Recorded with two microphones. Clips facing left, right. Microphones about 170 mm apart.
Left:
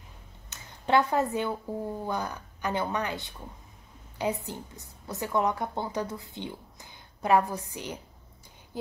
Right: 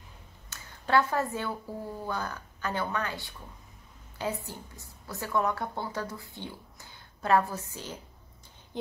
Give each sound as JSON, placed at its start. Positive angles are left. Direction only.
{"t": 0.5, "sound": "speech", "side_deg": 20}
{"t": 4.5, "sound": "a woman's voice", "side_deg": 20}